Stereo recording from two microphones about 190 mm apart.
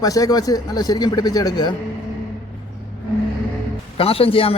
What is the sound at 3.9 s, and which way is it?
Speech, 30° left (ahead or behind).